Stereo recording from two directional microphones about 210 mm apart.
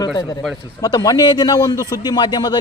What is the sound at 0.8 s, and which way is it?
A man's voice, 20° left (ahead or behind).